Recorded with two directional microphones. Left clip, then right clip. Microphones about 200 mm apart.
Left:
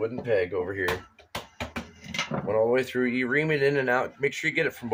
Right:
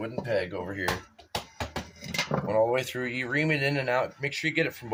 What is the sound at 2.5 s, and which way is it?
Speech, 20° left (ahead or behind).